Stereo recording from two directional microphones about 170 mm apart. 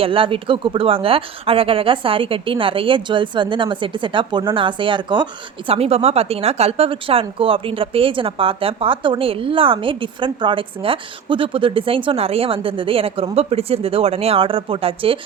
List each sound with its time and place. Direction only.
0.0 s a woman's voice: 30° right (ahead or behind)